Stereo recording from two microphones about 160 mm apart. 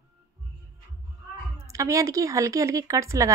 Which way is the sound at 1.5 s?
20° right (ahead or behind).